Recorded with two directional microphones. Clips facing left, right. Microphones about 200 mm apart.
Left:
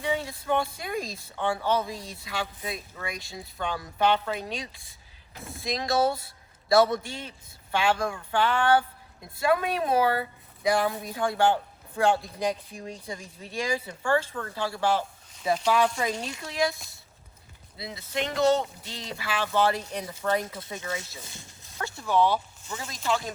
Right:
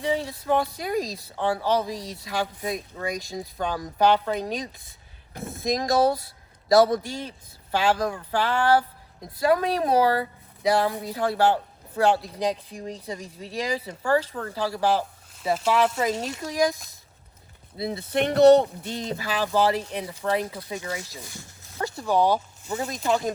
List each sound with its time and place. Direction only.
0.0 s speech: 35° right (ahead or behind)
15.5 s speech: 5° right (ahead or behind)
16.4 s speech: 40° right (ahead or behind)
17.7 s speech: 50° right (ahead or behind); by 21.0 s 20° right (ahead or behind)
21.2 s speech: 20° left (ahead or behind)
21.8 s a sound: 35° right (ahead or behind)
22.1 s speech: 40° right (ahead or behind)